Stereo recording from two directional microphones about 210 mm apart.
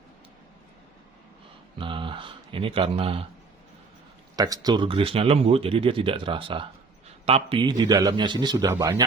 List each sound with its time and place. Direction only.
1.8 s speech: 25° right (ahead or behind)
4.4 s speech: 15° right (ahead or behind)